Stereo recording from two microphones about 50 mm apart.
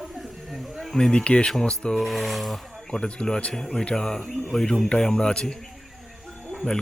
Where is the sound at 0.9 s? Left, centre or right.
Centre.